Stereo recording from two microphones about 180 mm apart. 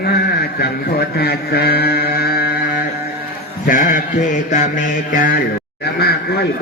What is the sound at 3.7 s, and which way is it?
Mantra, 45° left (ahead or behind).